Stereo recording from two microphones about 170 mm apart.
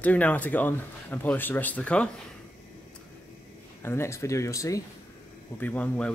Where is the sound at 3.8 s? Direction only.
15° left (ahead or behind).